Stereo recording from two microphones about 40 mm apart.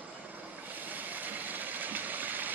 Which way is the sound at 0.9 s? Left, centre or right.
Right.